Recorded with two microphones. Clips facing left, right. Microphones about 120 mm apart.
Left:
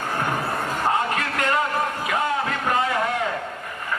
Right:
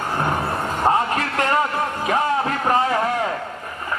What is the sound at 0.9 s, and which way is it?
Music, 30° right (ahead or behind).